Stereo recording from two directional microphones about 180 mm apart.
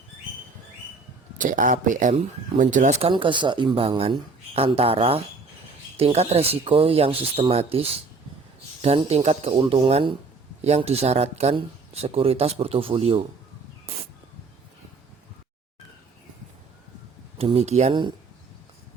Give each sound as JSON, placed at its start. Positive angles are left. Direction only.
{"t": 1.4, "sound": "speech", "side_deg": -45}
{"t": 17.3, "sound": "speech", "side_deg": -35}